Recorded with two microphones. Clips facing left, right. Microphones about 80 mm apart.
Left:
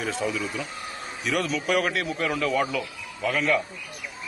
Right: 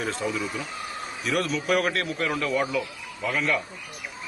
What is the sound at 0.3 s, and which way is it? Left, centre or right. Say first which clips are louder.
Speech: even; right.